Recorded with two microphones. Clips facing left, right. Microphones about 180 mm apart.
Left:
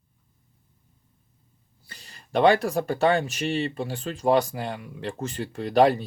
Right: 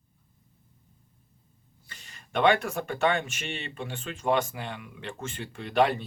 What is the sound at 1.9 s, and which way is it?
Speech, 35° left (ahead or behind).